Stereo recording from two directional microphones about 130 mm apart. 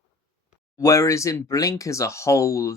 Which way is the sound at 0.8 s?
25° left (ahead or behind).